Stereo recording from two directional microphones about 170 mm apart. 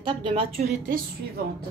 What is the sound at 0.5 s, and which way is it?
Speech, 60° right (ahead or behind).